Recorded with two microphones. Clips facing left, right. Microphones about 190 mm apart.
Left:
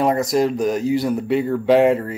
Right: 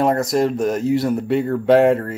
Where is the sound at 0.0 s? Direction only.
Centre (ahead or behind).